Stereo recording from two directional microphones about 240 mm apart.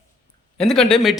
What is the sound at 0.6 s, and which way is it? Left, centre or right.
Speech, centre.